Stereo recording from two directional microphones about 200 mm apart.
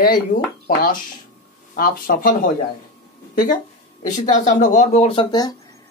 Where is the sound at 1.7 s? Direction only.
45° left (ahead or behind).